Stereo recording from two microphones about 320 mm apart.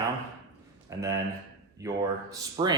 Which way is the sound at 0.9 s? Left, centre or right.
Centre.